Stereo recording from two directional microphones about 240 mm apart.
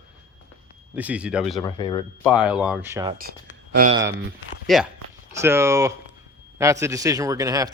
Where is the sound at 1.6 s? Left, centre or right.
Centre.